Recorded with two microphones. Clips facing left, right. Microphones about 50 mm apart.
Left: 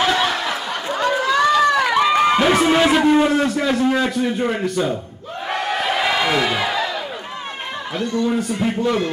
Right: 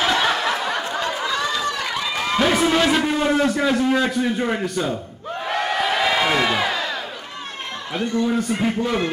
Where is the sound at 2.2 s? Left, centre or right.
Centre.